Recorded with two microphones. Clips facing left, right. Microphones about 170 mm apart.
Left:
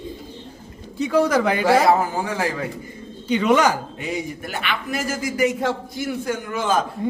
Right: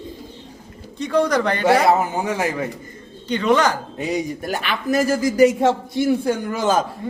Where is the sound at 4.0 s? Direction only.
40° right (ahead or behind).